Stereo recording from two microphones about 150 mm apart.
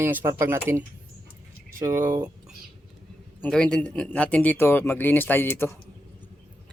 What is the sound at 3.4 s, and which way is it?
Speech, 5° left (ahead or behind).